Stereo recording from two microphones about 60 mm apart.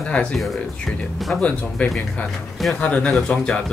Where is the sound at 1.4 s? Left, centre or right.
Centre.